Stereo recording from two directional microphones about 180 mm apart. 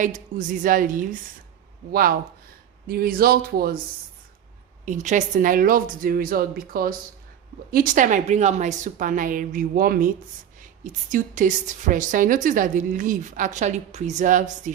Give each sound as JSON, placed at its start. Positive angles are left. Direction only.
{"t": 0.0, "sound": "a woman's voice", "side_deg": -45}
{"t": 4.9, "sound": "a woman's voice", "side_deg": -40}
{"t": 11.1, "sound": "a woman's voice", "side_deg": -45}